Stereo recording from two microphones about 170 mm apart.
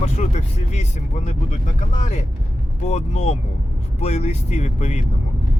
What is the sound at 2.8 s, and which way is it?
Speech, 40° left (ahead or behind).